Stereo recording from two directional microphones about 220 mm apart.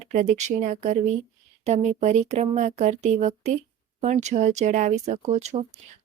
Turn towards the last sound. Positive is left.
turn(degrees=-30)  # may be behind; listen again after turning